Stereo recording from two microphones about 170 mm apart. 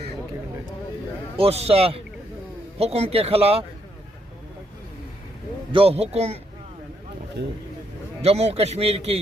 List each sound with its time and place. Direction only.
1.4 s a man's voice: 35° right (ahead or behind)
5.7 s a man's voice: 35° right (ahead or behind)
7.4 s speech: 85° right
8.2 s a man's voice: 40° right (ahead or behind)